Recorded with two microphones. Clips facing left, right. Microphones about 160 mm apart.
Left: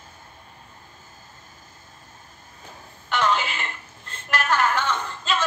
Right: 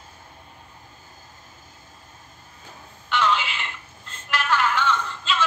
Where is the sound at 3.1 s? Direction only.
45° left (ahead or behind).